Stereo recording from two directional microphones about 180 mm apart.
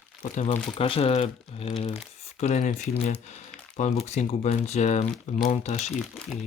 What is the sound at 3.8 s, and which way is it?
Speech, 40° left (ahead or behind).